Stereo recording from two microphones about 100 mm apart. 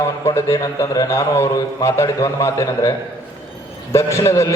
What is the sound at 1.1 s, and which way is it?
A man's voice, 25° left (ahead or behind).